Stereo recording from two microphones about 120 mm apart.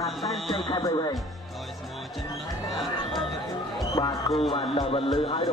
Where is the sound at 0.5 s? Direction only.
40° left (ahead or behind).